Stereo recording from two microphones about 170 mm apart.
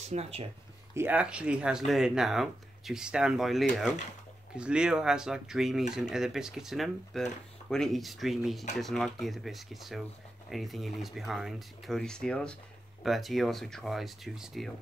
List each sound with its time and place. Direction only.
0.1 s speech: 35° right (ahead or behind)
0.9 s speech: 10° right (ahead or behind)